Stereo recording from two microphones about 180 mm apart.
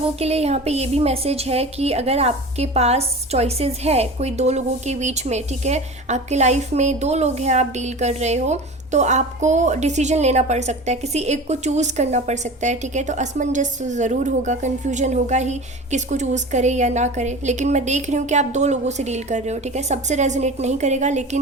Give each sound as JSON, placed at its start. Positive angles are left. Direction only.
{"t": 0.2, "sound": "a woman's voice", "side_deg": -35}